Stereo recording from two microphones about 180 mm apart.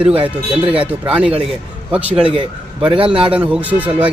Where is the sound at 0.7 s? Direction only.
5° right (ahead or behind).